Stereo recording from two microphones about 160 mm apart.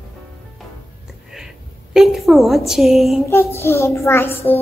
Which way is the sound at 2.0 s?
Centre (ahead or behind).